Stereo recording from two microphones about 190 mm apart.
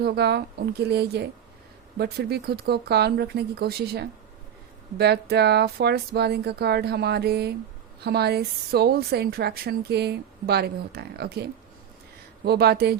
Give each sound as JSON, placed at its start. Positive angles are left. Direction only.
{"t": 0.0, "sound": "a woman's voice", "side_deg": -60}
{"t": 12.5, "sound": "a woman's voice", "side_deg": -55}